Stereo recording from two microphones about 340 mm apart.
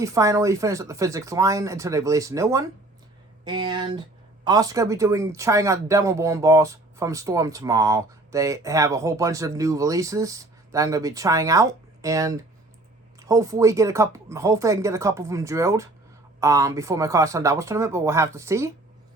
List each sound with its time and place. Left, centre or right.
0.0 s speech: centre